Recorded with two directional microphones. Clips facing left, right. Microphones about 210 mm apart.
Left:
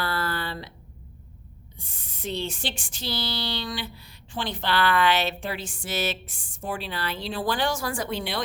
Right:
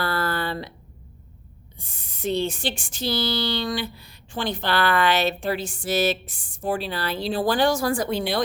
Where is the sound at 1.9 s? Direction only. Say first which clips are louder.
Right 7 dB; 45° right (ahead or behind).